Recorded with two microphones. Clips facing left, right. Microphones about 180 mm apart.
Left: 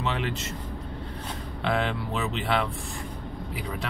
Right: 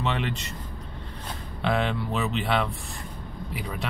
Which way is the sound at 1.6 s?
Centre (ahead or behind).